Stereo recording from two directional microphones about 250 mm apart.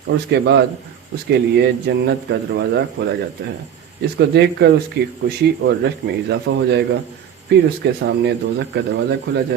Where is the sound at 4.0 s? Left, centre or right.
Right.